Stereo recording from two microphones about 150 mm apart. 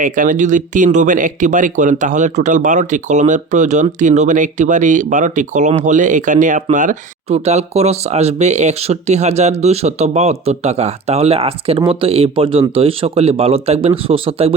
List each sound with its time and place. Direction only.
0.0 s speech: 60° right (ahead or behind); by 14.5 s 40° right (ahead or behind)